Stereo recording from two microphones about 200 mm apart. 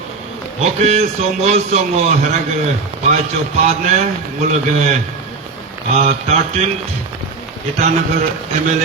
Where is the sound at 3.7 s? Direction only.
35° right (ahead or behind).